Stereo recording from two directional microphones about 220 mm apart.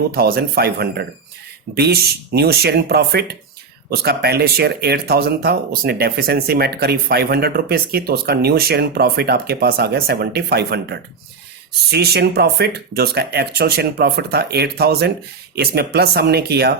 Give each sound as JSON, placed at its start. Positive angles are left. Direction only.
{"t": 0.1, "sound": "speech", "side_deg": -45}